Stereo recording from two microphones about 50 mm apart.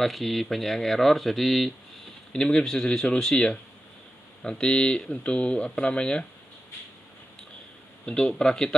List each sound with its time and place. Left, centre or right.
0.0 s speech: centre; by 6.2 s left
8.0 s speech: centre